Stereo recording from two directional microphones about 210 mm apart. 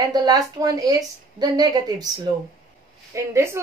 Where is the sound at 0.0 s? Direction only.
20° right (ahead or behind).